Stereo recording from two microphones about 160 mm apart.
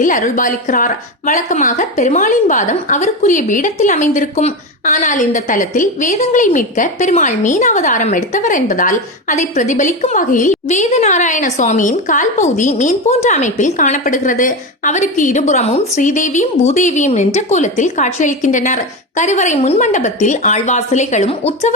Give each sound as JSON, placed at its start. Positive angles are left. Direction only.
{"t": 0.0, "sound": "a woman's voice", "side_deg": 55}